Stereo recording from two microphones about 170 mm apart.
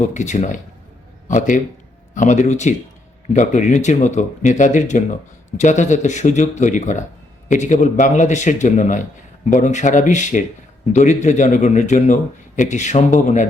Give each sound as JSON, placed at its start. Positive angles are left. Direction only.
{"t": 0.0, "sound": "a man's voice", "side_deg": 45}